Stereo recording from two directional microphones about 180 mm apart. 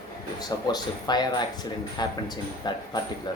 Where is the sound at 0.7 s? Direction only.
25° left (ahead or behind).